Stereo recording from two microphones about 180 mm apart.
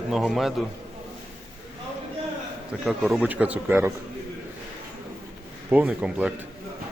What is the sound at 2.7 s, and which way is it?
A man's voice, 5° right (ahead or behind).